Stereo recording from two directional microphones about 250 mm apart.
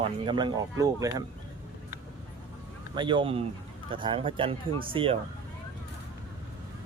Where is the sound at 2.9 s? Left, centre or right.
Centre.